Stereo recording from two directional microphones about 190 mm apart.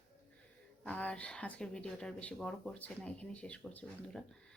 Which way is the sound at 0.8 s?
5° left (ahead or behind).